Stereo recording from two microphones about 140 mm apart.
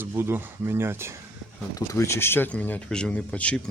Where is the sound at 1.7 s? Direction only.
20° left (ahead or behind).